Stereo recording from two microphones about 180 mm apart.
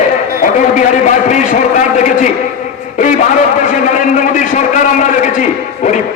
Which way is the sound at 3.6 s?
45° left (ahead or behind).